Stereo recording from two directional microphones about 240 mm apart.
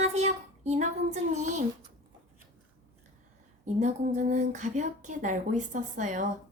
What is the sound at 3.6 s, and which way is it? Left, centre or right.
A woman's voice, right.